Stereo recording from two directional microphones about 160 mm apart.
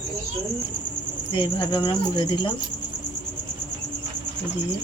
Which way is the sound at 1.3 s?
30° left (ahead or behind).